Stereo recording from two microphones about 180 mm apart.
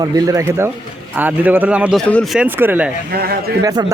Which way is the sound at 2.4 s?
10° right (ahead or behind).